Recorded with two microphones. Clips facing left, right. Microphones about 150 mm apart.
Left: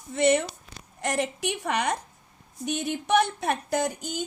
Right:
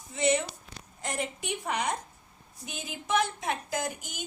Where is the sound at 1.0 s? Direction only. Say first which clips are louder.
Left 7 dB; 80° left.